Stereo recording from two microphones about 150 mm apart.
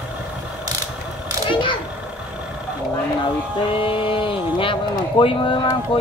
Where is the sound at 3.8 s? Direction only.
35° left (ahead or behind).